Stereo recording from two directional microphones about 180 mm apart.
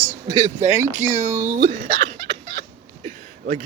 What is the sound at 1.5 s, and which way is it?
Speech, 45° right (ahead or behind).